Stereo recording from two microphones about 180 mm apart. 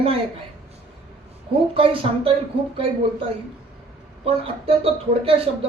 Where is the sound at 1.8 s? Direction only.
30° right (ahead or behind).